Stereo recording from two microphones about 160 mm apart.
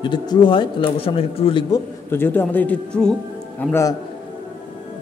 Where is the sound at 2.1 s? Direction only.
10° left (ahead or behind).